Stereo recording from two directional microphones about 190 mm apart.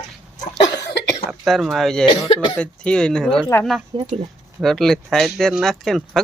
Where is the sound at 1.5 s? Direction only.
Centre (ahead or behind).